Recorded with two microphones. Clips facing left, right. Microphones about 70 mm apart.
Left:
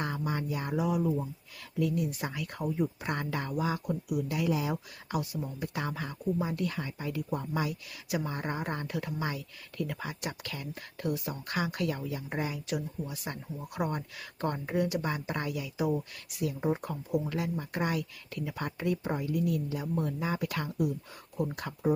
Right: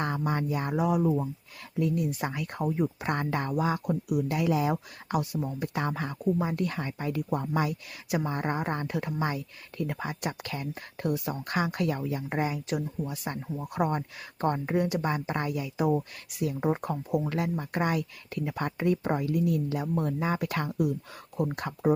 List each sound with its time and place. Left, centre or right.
0.0 s speech: right
5.3 s speech: right